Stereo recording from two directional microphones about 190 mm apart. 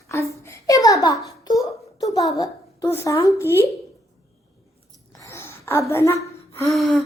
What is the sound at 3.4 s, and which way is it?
Speech, 15° left (ahead or behind).